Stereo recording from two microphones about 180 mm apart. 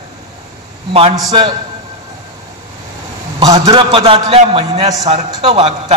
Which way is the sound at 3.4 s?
25° right (ahead or behind).